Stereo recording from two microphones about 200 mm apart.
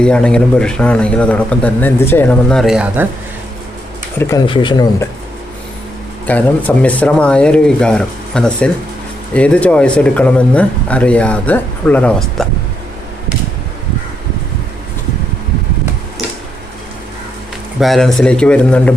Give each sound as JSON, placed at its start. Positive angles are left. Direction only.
{"t": 0.0, "sound": "a man's voice", "side_deg": 5}
{"t": 4.4, "sound": "speech", "side_deg": 25}
{"t": 6.2, "sound": "a man's voice", "side_deg": 10}
{"t": 17.7, "sound": "a man's voice", "side_deg": 0}